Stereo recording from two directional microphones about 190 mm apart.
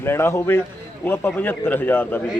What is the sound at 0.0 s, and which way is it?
A man's voice, 10° left (ahead or behind).